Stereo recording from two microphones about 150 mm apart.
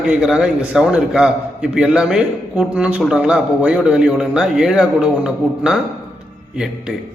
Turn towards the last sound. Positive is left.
turn(degrees=-5)  # may be behind; listen again after turning